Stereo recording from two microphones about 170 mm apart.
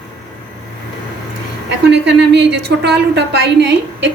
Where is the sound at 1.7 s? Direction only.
85° right.